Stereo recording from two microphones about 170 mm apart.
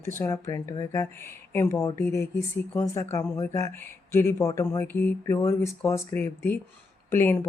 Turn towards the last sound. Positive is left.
turn(degrees=15)  # may be behind; listen again after turning